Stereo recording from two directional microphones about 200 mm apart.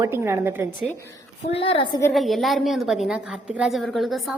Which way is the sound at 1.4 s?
30° left (ahead or behind).